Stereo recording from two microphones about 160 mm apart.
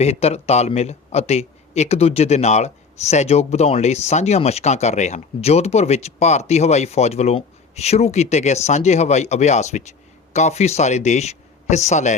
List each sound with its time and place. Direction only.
0.0 s a man's voice: 40° left (ahead or behind)